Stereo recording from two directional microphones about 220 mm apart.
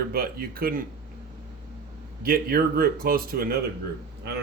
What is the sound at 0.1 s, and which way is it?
Speech, 40° right (ahead or behind).